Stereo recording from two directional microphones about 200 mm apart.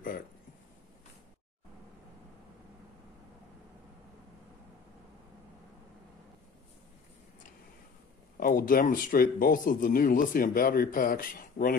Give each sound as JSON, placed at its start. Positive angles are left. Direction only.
{"t": 8.4, "sound": "speech", "side_deg": 45}